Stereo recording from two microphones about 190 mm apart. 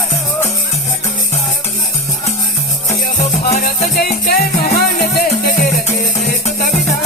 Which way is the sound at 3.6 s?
55° left (ahead or behind).